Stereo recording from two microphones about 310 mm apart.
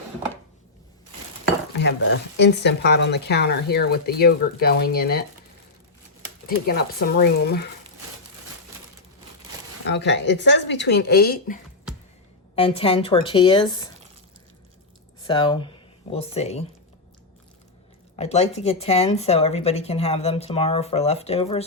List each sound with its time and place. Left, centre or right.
1.8 s speech: left
6.7 s speech: left
9.8 s a woman's voice: left; by 13.8 s centre
15.2 s speech: centre
18.2 s speech: centre